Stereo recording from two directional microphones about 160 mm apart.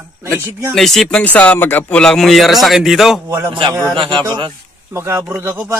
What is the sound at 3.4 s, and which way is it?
A man's voice, 30° right (ahead or behind).